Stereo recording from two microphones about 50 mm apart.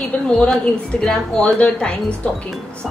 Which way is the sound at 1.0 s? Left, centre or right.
Centre.